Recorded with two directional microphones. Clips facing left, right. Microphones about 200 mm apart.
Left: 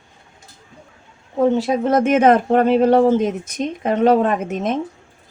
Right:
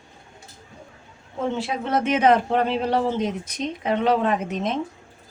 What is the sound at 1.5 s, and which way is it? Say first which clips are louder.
Speech: left 8 dB; 40° left (ahead or behind).